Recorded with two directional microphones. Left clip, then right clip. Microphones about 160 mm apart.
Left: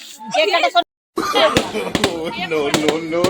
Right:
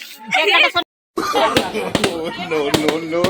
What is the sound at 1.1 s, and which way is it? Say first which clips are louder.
Speech: left 1 dB; centre (ahead or behind).